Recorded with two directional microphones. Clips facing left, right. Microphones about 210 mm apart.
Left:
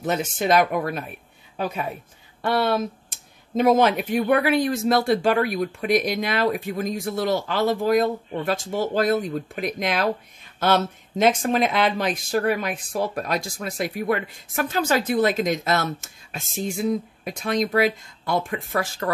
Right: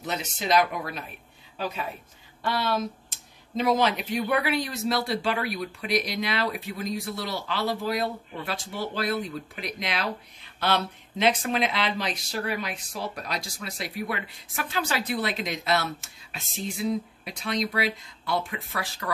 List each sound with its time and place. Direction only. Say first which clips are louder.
0.0 s speech: left 8 dB; 50° left (ahead or behind)
2.4 s speech: left 5 dB; 55° left (ahead or behind)